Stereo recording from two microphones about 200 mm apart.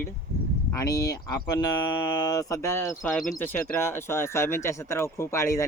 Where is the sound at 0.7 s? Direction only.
15° left (ahead or behind).